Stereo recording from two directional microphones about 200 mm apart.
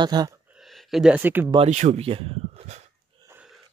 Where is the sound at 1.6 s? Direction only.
35° right (ahead or behind).